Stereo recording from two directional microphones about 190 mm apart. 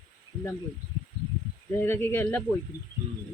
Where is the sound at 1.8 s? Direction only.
10° left (ahead or behind).